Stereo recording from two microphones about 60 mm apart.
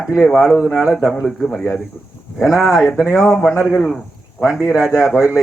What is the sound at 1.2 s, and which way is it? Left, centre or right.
Speech, centre.